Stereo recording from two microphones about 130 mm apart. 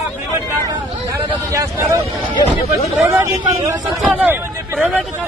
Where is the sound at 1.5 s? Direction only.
20° right (ahead or behind).